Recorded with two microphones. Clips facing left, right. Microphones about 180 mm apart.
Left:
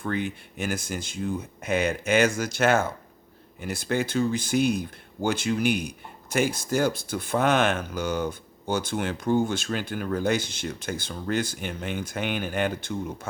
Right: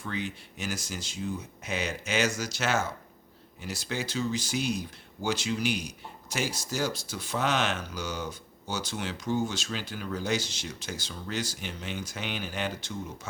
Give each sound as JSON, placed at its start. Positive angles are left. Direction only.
{"t": 0.0, "sound": "speech", "side_deg": 55}